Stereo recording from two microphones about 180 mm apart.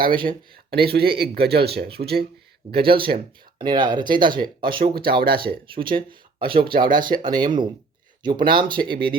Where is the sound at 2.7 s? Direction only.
30° right (ahead or behind).